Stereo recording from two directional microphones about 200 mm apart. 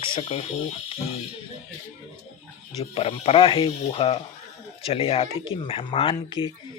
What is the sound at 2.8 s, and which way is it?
Speech, 30° left (ahead or behind).